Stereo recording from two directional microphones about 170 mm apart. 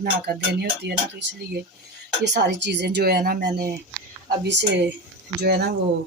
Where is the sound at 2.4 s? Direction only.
90° right; by 3.7 s 65° right (ahead or behind).